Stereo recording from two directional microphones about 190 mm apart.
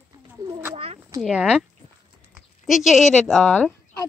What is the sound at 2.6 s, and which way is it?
A woman's voice, centre (ahead or behind).